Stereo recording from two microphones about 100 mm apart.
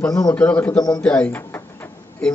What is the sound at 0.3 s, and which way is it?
Speech, 15° left (ahead or behind).